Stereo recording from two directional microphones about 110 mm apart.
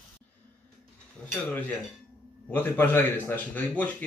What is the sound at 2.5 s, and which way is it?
Speech, 20° left (ahead or behind).